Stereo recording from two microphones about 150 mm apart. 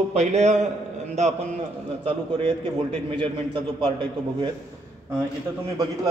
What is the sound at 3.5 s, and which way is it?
A man's voice, 30° right (ahead or behind).